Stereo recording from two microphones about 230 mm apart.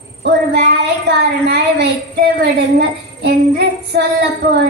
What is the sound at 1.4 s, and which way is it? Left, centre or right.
A woman's voice, right.